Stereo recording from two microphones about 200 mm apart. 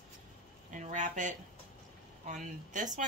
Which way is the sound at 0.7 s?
40° right (ahead or behind).